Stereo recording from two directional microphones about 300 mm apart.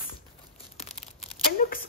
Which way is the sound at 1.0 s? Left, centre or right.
Left.